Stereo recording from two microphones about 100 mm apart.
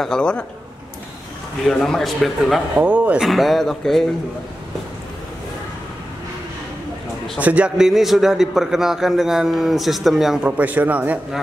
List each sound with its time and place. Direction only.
0.0 s a man's voice: 5° left (ahead or behind)
1.7 s a man's voice: 5° left (ahead or behind)
2.7 s speech: 15° right (ahead or behind)
3.3 s a man's voice: centre (ahead or behind)
7.3 s a man's voice: 15° right (ahead or behind)
10.4 s speech: 15° right (ahead or behind)